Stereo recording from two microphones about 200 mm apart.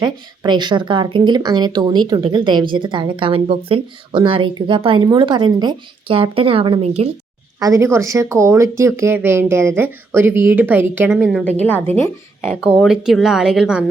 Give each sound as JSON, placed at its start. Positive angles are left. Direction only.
{"t": 0.0, "sound": "speech", "side_deg": -20}
{"t": 7.6, "sound": "speech", "side_deg": -15}
{"t": 12.5, "sound": "a woman's voice", "side_deg": -5}